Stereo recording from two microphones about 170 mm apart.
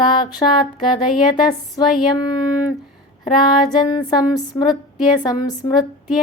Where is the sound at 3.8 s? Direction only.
20° left (ahead or behind).